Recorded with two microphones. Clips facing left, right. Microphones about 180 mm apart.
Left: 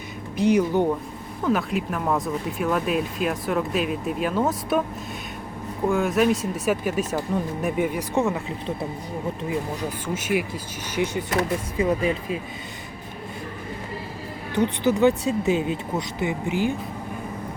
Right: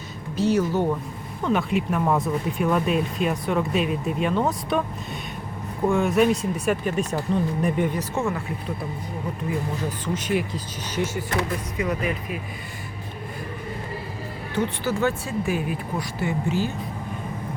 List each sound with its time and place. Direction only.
0.3 s speech: 15° left (ahead or behind)
1.5 s speech: centre (ahead or behind)
5.9 s speech: centre (ahead or behind); by 8.7 s 20° left (ahead or behind)
10.2 s speech: 10° left (ahead or behind)
11.8 s speech: 25° left (ahead or behind)
14.5 s speech: 15° left (ahead or behind)